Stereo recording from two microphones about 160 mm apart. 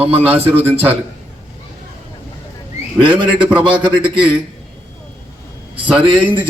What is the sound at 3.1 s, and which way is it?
A man's voice, 30° right (ahead or behind).